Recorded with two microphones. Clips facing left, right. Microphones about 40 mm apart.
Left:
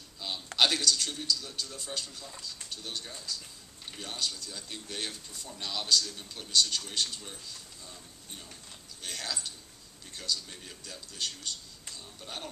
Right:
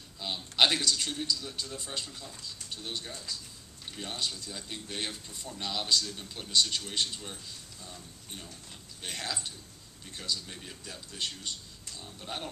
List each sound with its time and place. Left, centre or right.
0.2 s a sound: centre
0.6 s speech: centre
9.0 s speech: right